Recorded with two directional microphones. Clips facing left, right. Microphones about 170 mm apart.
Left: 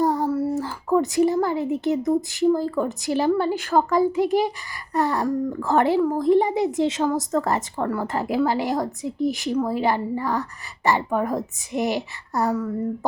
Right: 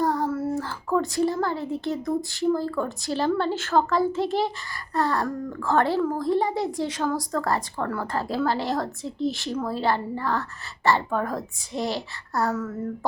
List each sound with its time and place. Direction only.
0.0 s a woman's voice: 20° left (ahead or behind)